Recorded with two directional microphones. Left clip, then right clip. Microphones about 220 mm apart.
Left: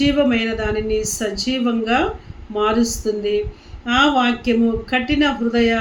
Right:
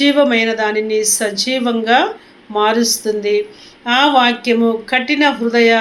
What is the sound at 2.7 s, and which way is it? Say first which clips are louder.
Speech: right 5 dB; 40° right (ahead or behind).